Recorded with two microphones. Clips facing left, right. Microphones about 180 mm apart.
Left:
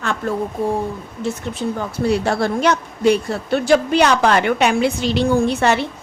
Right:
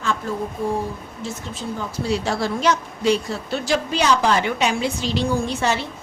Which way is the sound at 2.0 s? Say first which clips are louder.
Left 5 dB; 60° left (ahead or behind).